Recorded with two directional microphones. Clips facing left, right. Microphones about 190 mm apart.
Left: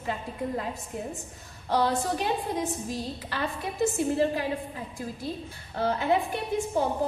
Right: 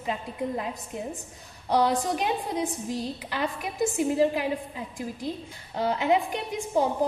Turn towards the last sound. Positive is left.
turn(degrees=-15)  # may be behind; listen again after turning